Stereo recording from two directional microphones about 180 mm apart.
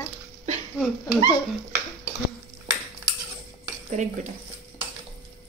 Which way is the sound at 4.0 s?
40° right (ahead or behind).